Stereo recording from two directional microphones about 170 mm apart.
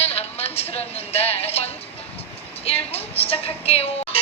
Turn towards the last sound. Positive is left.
turn(degrees=35)  # may be behind; listen again after turning